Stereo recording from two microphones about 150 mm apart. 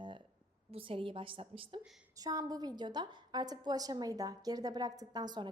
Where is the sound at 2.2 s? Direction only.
25° right (ahead or behind).